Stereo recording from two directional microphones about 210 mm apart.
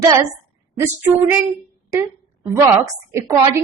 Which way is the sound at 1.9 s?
15° right (ahead or behind).